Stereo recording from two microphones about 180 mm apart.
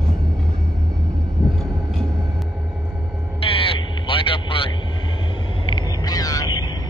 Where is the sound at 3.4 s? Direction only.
30° left (ahead or behind).